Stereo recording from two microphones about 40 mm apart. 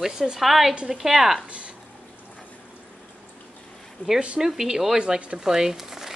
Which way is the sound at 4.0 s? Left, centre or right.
Left.